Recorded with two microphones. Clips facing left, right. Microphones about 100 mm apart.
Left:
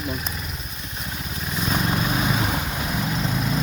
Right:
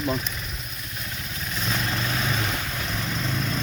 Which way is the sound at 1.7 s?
20° left (ahead or behind).